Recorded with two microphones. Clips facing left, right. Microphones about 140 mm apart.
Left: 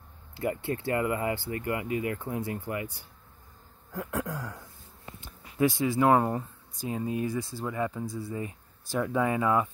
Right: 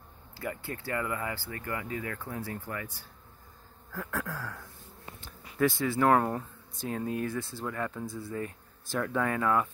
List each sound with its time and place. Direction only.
0.4 s speech: 25° left (ahead or behind)